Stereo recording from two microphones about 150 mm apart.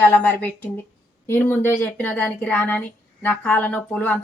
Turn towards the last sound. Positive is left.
turn(degrees=10)  # may be behind; listen again after turning